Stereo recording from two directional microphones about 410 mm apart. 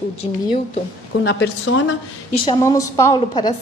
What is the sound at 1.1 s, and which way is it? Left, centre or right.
Speech, left.